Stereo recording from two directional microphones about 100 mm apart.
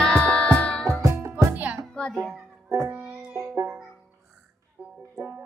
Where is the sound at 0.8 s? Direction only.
30° right (ahead or behind).